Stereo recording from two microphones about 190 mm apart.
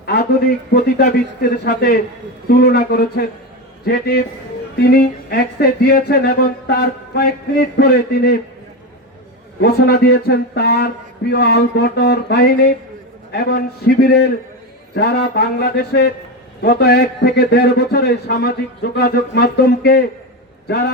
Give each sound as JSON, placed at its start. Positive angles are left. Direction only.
{"t": 0.0, "sound": "a sound", "side_deg": 55}
{"t": 0.7, "sound": "speech", "side_deg": 55}
{"t": 9.6, "sound": "speech", "side_deg": 55}